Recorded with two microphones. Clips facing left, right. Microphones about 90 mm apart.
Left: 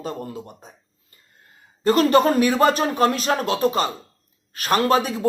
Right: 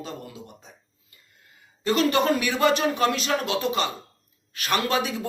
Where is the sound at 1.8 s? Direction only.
40° left (ahead or behind).